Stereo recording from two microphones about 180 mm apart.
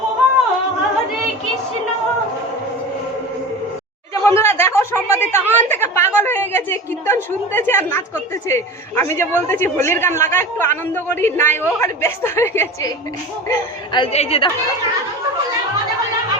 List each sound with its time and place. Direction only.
4.1 s a sound: 15° left (ahead or behind)
6.1 s a woman's voice: 10° left (ahead or behind)
13.5 s a woman's voice: 25° left (ahead or behind)